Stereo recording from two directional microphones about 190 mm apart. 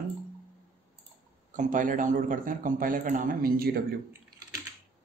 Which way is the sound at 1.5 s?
45° right (ahead or behind).